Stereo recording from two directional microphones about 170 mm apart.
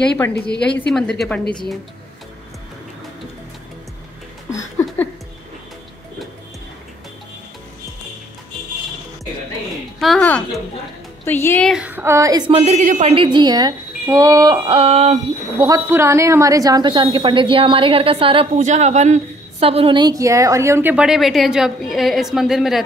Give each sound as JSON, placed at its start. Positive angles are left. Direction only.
{"t": 0.3, "sound": "a woman's voice", "side_deg": 80}
{"t": 0.7, "sound": "a woman's voice", "side_deg": 5}
{"t": 4.6, "sound": "a sound", "side_deg": 15}
{"t": 9.9, "sound": "a woman's voice", "side_deg": 0}
{"t": 11.7, "sound": "a woman's voice", "side_deg": -10}
{"t": 12.5, "sound": "a woman's voice", "side_deg": -40}
{"t": 13.1, "sound": "a woman's voice", "side_deg": -30}
{"t": 15.6, "sound": "a woman's voice", "side_deg": -15}